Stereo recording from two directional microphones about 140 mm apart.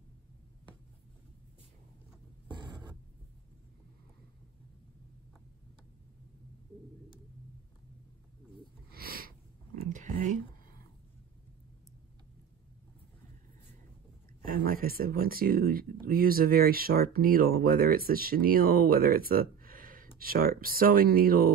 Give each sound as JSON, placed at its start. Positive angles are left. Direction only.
{"t": 8.9, "sound": "a sound", "side_deg": -90}
{"t": 9.8, "sound": "whispering", "side_deg": -65}
{"t": 14.4, "sound": "speech", "side_deg": -90}